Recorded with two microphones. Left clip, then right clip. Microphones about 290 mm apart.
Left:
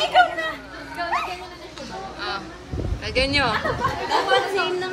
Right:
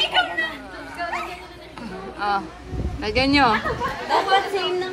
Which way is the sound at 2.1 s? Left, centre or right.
Centre.